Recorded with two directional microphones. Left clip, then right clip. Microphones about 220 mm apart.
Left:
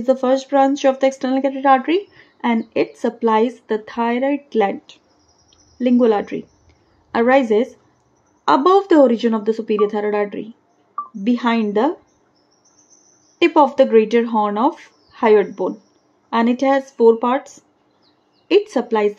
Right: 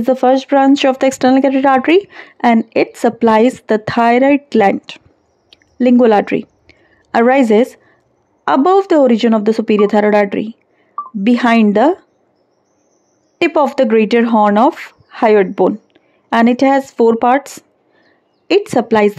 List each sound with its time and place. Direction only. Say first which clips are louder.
0.0 s a woman's voice: right 5 dB; 45° right (ahead or behind)
13.4 s speech: right 1 dB; 45° right (ahead or behind)